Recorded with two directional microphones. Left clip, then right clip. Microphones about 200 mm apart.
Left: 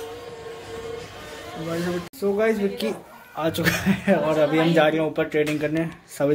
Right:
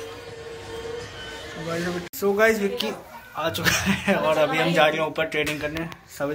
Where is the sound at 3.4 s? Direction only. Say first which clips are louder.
Even; 50° left (ahead or behind).